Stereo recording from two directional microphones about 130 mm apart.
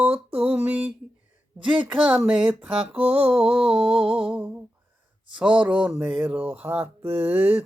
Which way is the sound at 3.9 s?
45° right (ahead or behind).